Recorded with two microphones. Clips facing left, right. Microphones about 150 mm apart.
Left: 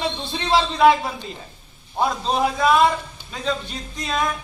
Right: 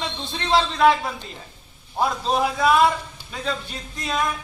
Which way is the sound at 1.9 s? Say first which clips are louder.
Even; 5° right (ahead or behind).